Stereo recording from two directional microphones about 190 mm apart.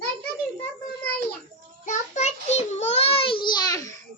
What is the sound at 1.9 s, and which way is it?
Child singing, 35° left (ahead or behind).